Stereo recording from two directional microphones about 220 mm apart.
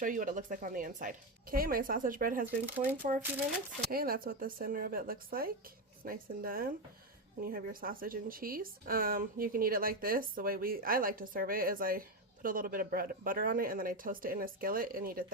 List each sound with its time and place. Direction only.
0.0 s speech: 35° right (ahead or behind)
2.6 s speech: 10° right (ahead or behind)
3.9 s speech: 40° right (ahead or behind)